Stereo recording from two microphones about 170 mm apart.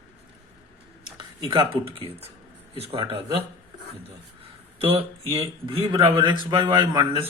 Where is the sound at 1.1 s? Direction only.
30° right (ahead or behind).